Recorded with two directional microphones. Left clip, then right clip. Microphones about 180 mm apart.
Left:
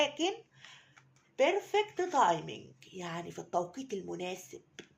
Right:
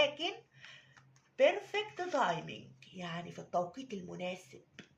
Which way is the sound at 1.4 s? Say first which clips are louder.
Left 1 dB; 45° left (ahead or behind).